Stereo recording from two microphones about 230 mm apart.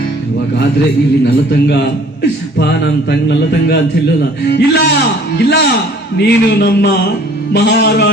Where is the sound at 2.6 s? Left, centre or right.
Left.